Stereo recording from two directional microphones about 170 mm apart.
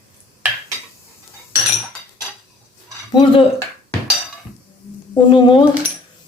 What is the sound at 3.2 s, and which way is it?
Speech, 30° left (ahead or behind).